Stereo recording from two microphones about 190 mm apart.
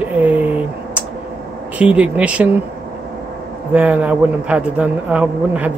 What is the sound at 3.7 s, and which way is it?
Speech, 10° right (ahead or behind).